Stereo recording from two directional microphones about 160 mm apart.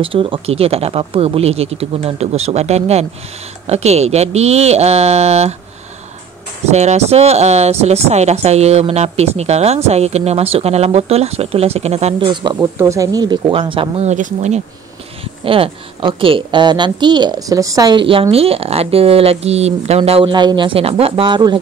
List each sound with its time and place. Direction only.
0.0 s speech: 35° right (ahead or behind)
6.7 s speech: 45° right (ahead or behind)
12.5 s speech: 15° right (ahead or behind); by 14.6 s 50° right (ahead or behind)
15.4 s a woman's voice: 35° right (ahead or behind)